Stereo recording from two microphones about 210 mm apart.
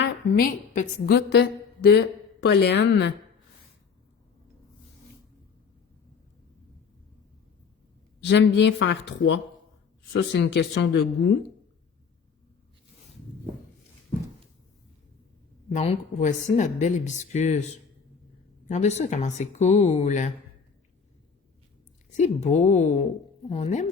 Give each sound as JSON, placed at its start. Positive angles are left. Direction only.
{"t": 0.3, "sound": "a woman's voice", "side_deg": 40}
{"t": 8.2, "sound": "speech", "side_deg": 55}
{"t": 15.7, "sound": "a woman's voice", "side_deg": 30}
{"t": 22.1, "sound": "a woman's voice", "side_deg": 35}